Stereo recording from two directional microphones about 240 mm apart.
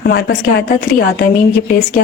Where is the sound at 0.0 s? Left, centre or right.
Left.